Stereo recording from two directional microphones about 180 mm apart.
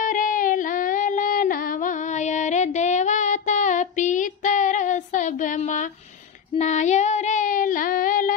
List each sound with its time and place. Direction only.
0.0 s female singing: 50° left (ahead or behind)
6.5 s child singing: 40° left (ahead or behind)